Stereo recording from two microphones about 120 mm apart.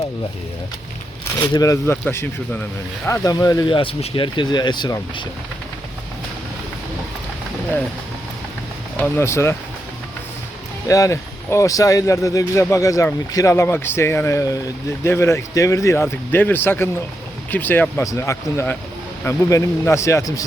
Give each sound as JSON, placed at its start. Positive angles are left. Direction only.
{"t": 1.4, "sound": "speech", "side_deg": 25}
{"t": 3.1, "sound": "speech", "side_deg": 30}
{"t": 3.7, "sound": "speech", "side_deg": 50}
{"t": 9.0, "sound": "speech", "side_deg": 20}
{"t": 10.8, "sound": "speech", "side_deg": 25}